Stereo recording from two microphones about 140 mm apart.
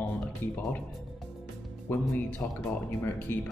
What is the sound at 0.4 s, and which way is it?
Speech, 15° left (ahead or behind).